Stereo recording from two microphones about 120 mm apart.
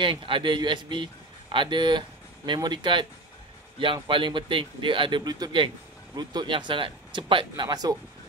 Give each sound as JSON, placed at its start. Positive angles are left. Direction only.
{"t": 0.0, "sound": "speech", "side_deg": -45}